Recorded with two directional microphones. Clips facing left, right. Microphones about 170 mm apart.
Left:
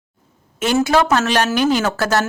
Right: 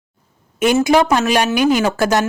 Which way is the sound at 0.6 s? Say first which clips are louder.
Right 3 dB; 15° right (ahead or behind).